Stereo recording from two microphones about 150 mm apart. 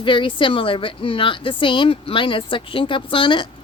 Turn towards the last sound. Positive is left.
turn(degrees=35)  # may be behind; listen again after turning